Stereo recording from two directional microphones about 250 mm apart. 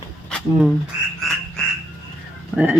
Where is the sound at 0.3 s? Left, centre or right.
Centre.